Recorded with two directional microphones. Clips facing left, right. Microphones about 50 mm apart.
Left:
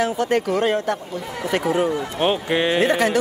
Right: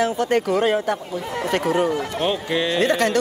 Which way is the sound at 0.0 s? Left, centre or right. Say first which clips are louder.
Even; centre.